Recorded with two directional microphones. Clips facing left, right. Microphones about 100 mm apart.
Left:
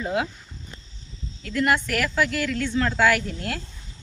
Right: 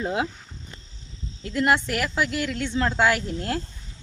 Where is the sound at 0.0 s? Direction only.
25° right (ahead or behind).